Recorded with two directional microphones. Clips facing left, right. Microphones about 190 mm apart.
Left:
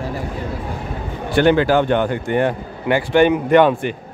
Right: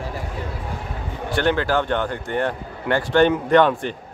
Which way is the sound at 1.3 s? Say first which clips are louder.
Left 6 dB; 15° left (ahead or behind).